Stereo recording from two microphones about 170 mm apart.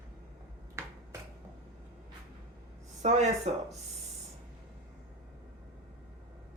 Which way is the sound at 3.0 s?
45° right (ahead or behind).